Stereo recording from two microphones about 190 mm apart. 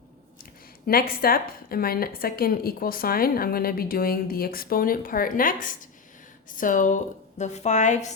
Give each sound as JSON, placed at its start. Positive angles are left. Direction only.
{"t": 0.9, "sound": "a woman's voice", "side_deg": 50}